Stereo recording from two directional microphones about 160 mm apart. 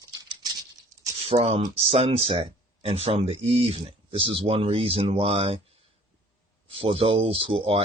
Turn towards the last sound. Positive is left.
turn(degrees=-35)  # may be behind; listen again after turning